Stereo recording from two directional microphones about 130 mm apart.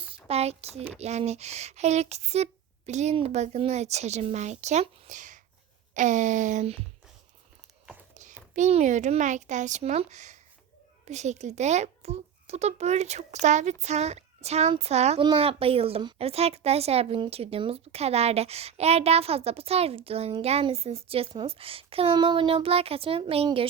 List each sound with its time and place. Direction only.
0.3 s a woman's voice: 55° right (ahead or behind)
8.5 s a child's voice: 65° right (ahead or behind)
15.2 s a woman's voice: 45° right (ahead or behind)